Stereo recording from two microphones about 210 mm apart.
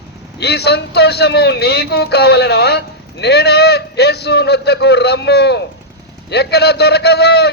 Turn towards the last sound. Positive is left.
turn(degrees=50)  # may be behind; listen again after turning